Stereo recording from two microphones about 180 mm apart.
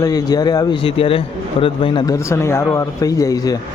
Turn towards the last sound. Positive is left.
turn(degrees=20)  # may be behind; listen again after turning